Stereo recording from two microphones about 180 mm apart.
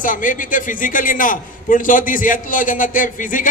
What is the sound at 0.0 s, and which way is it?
A man's voice, 45° left (ahead or behind).